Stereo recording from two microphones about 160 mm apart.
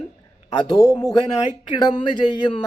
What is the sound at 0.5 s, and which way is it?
Speech, 25° left (ahead or behind).